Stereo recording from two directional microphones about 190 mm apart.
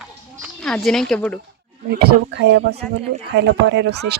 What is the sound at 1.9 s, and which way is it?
Speech, 55° right (ahead or behind).